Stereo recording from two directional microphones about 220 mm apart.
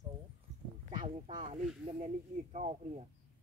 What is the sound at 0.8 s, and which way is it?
Speech, 25° right (ahead or behind).